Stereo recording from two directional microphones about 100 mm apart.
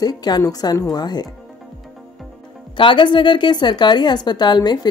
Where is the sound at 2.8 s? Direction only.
55° left (ahead or behind).